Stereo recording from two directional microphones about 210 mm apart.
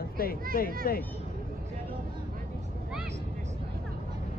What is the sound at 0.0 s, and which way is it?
Speech, 45° left (ahead or behind).